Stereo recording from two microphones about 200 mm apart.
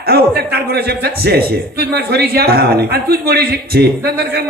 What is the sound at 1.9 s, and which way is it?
A man's voice, 55° right (ahead or behind).